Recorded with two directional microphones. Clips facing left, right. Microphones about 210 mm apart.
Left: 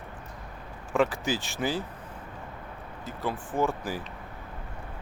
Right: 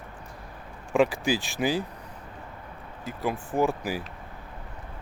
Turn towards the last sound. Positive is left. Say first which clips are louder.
# right 3 dB
turn(degrees=-10)  # may be behind; listen again after turning